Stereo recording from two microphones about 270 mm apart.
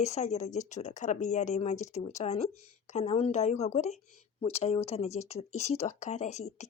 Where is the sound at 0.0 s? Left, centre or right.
Left.